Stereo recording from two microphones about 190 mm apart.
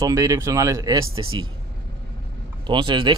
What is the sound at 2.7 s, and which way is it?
Speech, 25° right (ahead or behind).